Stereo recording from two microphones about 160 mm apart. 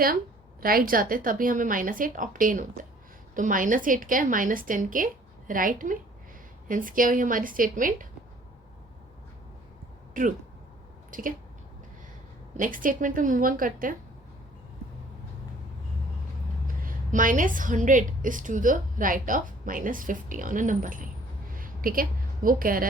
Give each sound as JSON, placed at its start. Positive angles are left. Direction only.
{"t": 0.6, "sound": "a woman's voice", "side_deg": -65}
{"t": 10.2, "sound": "a woman's voice", "side_deg": -55}
{"t": 12.5, "sound": "a woman's voice", "side_deg": -55}
{"t": 16.8, "sound": "a woman's voice", "side_deg": -55}